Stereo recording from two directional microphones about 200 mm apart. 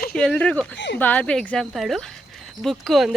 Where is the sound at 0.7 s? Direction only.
65° left (ahead or behind).